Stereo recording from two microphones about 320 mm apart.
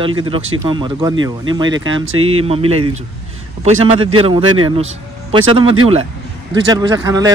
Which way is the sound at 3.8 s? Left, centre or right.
Centre.